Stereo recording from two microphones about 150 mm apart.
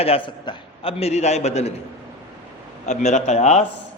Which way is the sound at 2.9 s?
50° left (ahead or behind).